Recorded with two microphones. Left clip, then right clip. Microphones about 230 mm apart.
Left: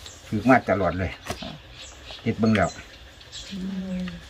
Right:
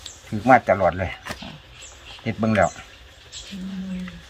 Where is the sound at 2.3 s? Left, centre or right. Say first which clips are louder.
Left 1 dB; centre.